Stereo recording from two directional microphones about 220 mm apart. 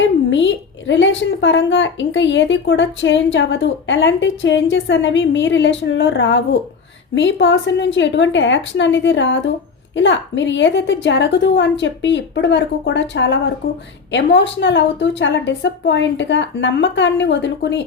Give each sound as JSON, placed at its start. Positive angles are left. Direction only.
{"t": 0.3, "sound": "a woman's voice", "side_deg": 55}